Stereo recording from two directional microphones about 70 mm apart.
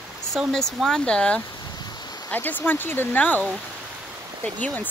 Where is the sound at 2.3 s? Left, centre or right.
Left.